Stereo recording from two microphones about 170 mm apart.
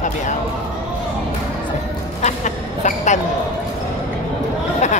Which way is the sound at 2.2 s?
45° left (ahead or behind).